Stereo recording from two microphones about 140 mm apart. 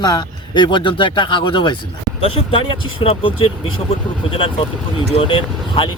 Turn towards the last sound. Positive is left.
turn(degrees=40)  # may be behind; listen again after turning